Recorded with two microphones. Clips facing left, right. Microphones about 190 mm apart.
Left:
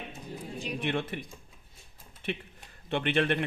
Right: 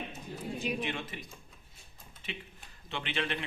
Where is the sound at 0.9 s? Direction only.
60° left (ahead or behind).